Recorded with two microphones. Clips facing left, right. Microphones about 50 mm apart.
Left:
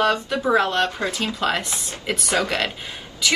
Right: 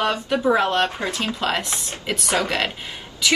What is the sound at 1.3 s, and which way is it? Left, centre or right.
Speech, centre.